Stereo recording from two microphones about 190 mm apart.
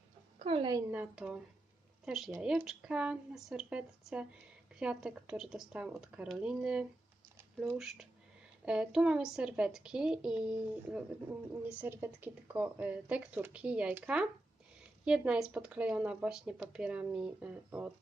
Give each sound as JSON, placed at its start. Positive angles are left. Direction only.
{"t": 0.3, "sound": "a woman's voice", "side_deg": -30}
{"t": 0.9, "sound": "speech", "side_deg": -5}